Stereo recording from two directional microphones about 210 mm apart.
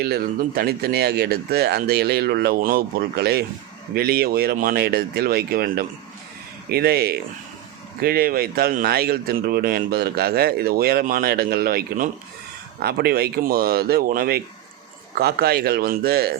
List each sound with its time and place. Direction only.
0.0 s speech: 45° right (ahead or behind)